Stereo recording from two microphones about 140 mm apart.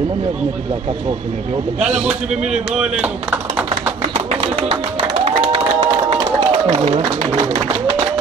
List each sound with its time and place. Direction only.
2.0 s speech: 5° right (ahead or behind)
4.3 s music: 50° right (ahead or behind)
5.8 s run: 30° right (ahead or behind)
6.7 s speech: 55° right (ahead or behind)
7.5 s speech: 35° right (ahead or behind)